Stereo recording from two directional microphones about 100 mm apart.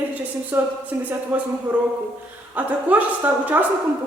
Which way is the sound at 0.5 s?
20° right (ahead or behind).